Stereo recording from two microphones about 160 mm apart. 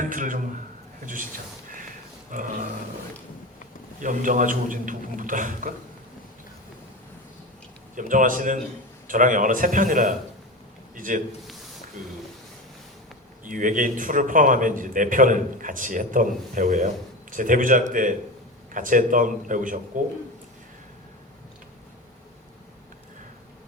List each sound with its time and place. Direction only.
0.0 s a man's voice: 55° right (ahead or behind)
2.3 s a man's voice: 55° right (ahead or behind)
4.0 s a man's voice: 55° right (ahead or behind)
7.9 s a man's voice: 55° right (ahead or behind)
13.4 s a man's voice: 55° right (ahead or behind)